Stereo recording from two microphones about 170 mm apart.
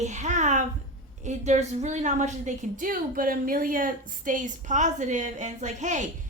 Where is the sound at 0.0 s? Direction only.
45° right (ahead or behind).